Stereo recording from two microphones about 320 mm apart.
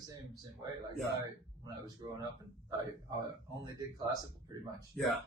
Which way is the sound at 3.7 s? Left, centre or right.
Centre.